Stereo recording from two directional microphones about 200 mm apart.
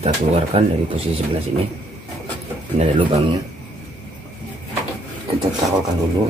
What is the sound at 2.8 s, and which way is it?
Speech, 30° right (ahead or behind).